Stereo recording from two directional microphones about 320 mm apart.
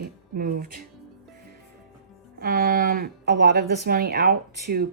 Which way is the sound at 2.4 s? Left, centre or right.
Right.